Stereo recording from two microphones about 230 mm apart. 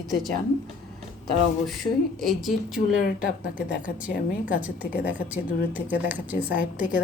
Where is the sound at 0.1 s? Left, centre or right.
Centre.